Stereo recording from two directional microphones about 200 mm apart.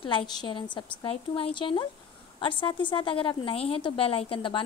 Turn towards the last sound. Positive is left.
turn(degrees=25)  # may be behind; listen again after turning